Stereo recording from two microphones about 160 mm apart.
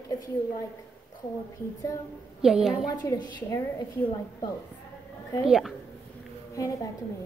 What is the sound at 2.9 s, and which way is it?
Speech, 25° left (ahead or behind).